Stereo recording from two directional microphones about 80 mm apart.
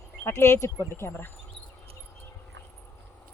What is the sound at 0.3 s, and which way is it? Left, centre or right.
Speech, left.